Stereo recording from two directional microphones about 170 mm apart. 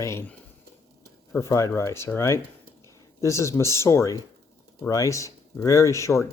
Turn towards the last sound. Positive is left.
turn(degrees=15)  # may be behind; listen again after turning